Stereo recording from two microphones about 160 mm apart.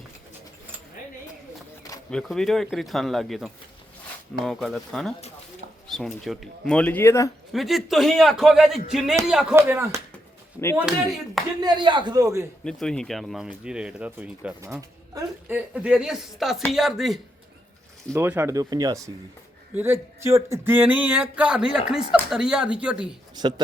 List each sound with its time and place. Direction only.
2.0 s speech: 5° left (ahead or behind)
7.5 s speech: centre (ahead or behind)
9.6 s speech: 15° right (ahead or behind)
11.6 s speech: 30° right (ahead or behind)
12.6 s speech: 5° left (ahead or behind)
18.1 s speech: 15° right (ahead or behind)
23.3 s speech: 25° right (ahead or behind)